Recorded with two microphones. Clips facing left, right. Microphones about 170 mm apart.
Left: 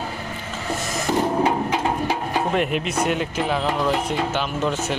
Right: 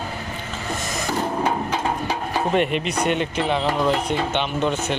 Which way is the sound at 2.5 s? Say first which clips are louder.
Right 3 dB; centre (ahead or behind).